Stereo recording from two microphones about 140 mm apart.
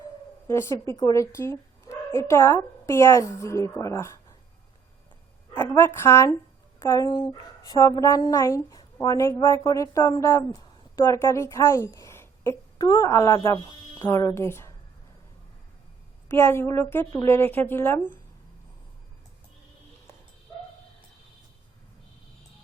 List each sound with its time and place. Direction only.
0.4 s a woman's voice: 20° left (ahead or behind)
5.5 s a woman's voice: 20° left (ahead or behind)
16.3 s a woman's voice: 15° left (ahead or behind)